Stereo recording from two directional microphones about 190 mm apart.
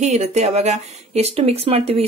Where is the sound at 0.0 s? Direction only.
35° right (ahead or behind).